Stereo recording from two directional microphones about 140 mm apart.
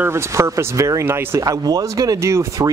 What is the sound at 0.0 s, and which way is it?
Speech, 20° right (ahead or behind).